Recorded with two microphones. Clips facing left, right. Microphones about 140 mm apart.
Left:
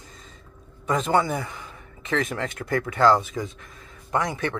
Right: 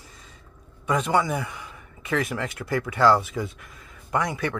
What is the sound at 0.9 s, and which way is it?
Speech, 25° left (ahead or behind).